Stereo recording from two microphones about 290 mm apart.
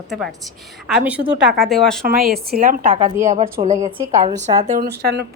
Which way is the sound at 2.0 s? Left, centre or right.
Right.